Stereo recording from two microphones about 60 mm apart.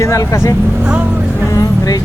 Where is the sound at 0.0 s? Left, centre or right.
Left.